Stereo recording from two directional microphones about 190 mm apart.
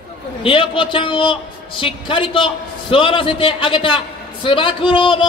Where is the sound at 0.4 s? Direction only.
30° left (ahead or behind).